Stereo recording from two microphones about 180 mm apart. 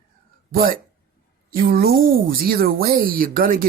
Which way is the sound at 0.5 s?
50° right (ahead or behind).